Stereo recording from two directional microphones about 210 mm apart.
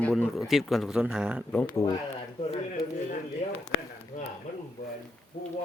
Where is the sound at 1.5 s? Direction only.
10° left (ahead or behind).